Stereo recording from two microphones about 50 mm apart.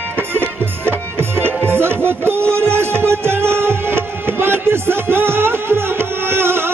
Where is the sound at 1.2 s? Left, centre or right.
Right.